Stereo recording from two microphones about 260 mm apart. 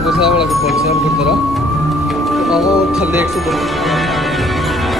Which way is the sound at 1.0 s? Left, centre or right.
Centre.